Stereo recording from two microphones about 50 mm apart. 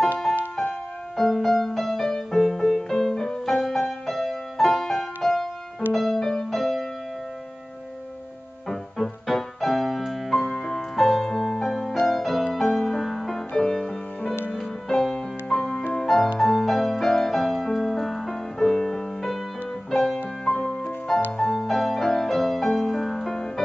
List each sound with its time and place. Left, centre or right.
1.1 s music: centre
8.6 s music: centre
13.5 s music: centre
21.5 s music: centre